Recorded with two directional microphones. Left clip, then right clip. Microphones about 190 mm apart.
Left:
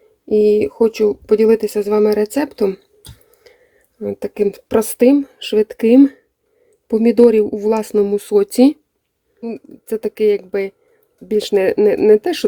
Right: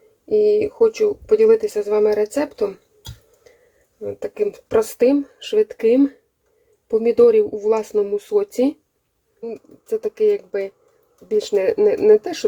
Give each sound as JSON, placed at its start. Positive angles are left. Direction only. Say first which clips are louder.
{"t": 0.3, "sound": "speech", "louder": "left 3 dB", "side_deg": 60}
{"t": 4.0, "sound": "speech", "louder": "left 4 dB", "side_deg": 60}
{"t": 9.4, "sound": "speech", "louder": "left 3 dB", "side_deg": 40}